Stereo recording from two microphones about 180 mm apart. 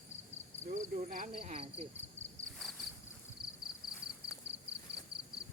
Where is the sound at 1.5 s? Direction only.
35° right (ahead or behind).